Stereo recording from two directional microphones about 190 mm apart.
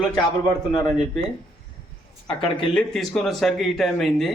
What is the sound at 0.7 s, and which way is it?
Speech, 20° left (ahead or behind).